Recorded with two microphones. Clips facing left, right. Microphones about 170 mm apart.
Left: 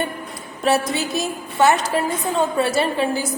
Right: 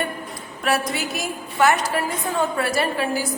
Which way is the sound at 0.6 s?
25° left (ahead or behind).